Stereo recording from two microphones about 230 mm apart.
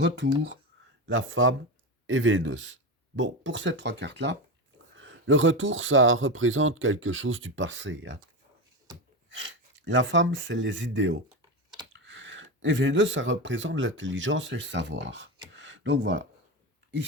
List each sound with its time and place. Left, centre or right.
0.0 s speech: right
9.3 s speech: right
15.5 s a sound: right